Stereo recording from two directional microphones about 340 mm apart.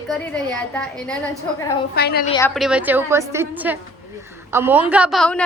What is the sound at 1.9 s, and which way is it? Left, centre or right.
Speech, left.